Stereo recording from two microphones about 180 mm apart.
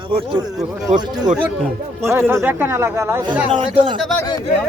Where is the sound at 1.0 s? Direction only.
20° right (ahead or behind).